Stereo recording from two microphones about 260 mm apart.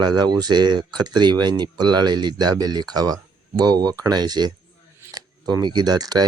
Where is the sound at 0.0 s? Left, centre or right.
Centre.